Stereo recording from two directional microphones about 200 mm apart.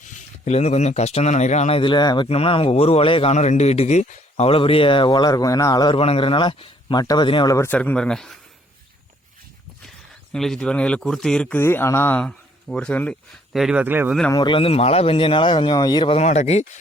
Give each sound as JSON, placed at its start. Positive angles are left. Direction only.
{"t": 0.4, "sound": "speech", "side_deg": 35}
{"t": 10.3, "sound": "speech", "side_deg": 5}
{"t": 14.3, "sound": "speech", "side_deg": 20}